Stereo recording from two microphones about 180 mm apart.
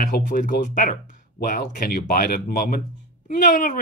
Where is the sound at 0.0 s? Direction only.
50° left (ahead or behind).